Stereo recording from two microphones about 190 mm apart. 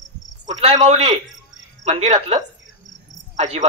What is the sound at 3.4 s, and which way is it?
Speech, 35° right (ahead or behind).